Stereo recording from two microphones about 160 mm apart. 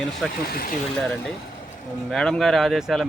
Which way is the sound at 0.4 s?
70° left (ahead or behind).